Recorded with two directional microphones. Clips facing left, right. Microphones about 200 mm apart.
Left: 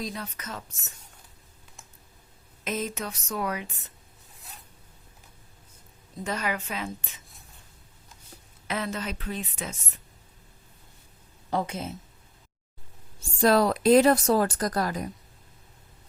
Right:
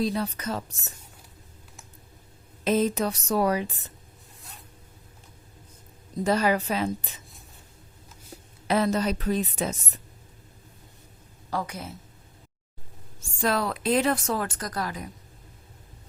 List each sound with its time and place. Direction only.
0.0 s a woman's voice: 35° right (ahead or behind)
2.6 s a woman's voice: 35° right (ahead or behind)
6.2 s a woman's voice: 35° right (ahead or behind)
8.6 s a woman's voice: 35° right (ahead or behind)
11.5 s a woman's voice: 25° left (ahead or behind)
13.1 s speech: 40° left (ahead or behind)